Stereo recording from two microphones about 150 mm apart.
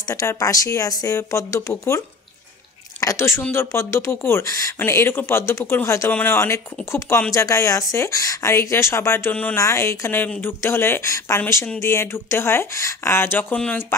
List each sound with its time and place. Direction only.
0.0 s speech: 20° left (ahead or behind)